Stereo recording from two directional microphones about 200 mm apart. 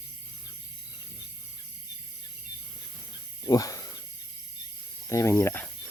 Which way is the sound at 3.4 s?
15° left (ahead or behind).